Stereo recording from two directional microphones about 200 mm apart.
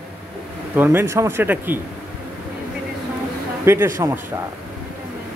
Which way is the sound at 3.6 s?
10° right (ahead or behind).